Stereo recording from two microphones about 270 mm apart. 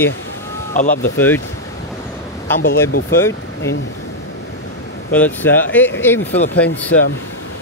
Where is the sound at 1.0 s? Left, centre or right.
Centre.